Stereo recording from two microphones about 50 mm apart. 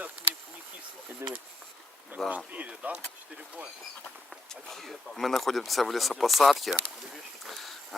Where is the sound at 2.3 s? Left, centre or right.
Right.